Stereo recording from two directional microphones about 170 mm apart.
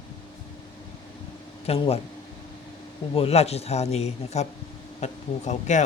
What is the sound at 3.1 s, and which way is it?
A man's voice, 35° left (ahead or behind).